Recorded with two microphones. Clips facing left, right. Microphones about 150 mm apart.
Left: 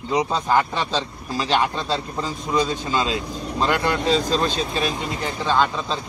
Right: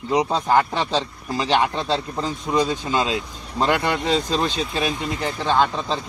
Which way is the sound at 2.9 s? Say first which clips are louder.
Right 1 dB; centre (ahead or behind).